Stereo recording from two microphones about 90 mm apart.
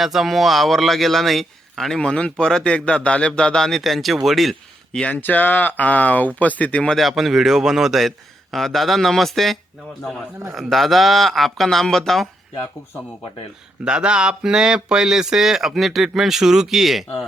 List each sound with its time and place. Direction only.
0.0 s a man's voice: centre (ahead or behind)
4.9 s speech: 15° left (ahead or behind)
6.9 s a man's voice: centre (ahead or behind)
13.8 s a man's voice: 10° right (ahead or behind)